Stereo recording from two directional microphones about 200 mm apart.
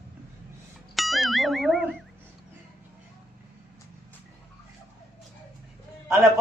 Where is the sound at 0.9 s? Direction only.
Centre (ahead or behind).